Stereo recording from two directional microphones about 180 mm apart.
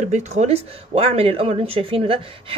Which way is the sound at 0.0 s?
40° right (ahead or behind).